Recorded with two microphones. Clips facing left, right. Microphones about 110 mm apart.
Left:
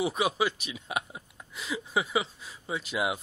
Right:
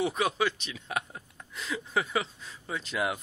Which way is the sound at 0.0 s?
10° left (ahead or behind).